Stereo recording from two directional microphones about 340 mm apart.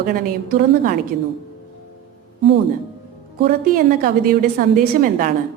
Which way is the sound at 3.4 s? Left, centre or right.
Right.